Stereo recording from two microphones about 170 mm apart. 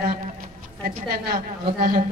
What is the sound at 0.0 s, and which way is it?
A woman's voice, 55° right (ahead or behind).